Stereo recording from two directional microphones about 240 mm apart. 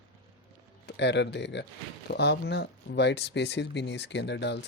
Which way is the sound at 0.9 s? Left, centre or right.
Left.